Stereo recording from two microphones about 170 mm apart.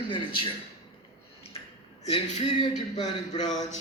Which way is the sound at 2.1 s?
40° left (ahead or behind).